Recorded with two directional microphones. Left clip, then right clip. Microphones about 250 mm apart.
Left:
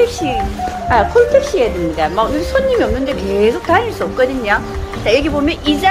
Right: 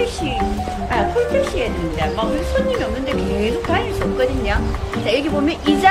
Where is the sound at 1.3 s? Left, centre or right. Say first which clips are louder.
Left 5 dB; centre.